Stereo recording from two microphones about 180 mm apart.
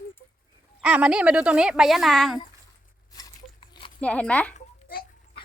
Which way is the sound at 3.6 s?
25° left (ahead or behind).